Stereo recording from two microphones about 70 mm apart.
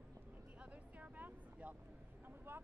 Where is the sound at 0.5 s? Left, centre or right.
Right.